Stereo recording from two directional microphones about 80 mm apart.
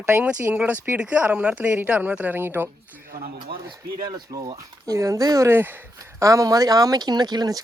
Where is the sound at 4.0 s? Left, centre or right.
Right.